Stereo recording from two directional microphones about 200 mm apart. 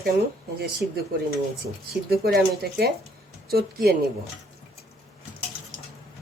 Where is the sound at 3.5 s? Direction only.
50° right (ahead or behind).